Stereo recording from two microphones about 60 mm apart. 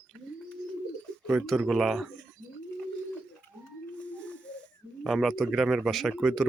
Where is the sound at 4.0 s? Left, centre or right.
Left.